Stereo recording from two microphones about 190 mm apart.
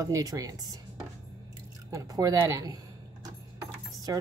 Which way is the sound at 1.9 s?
20° right (ahead or behind).